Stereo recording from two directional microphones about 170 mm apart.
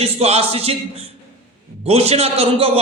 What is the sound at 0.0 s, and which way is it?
A man's voice, 35° right (ahead or behind).